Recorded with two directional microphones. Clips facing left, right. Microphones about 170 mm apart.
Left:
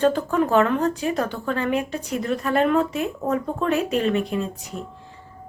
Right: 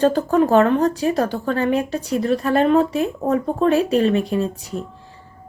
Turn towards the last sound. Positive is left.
turn(degrees=-35)  # may be behind; listen again after turning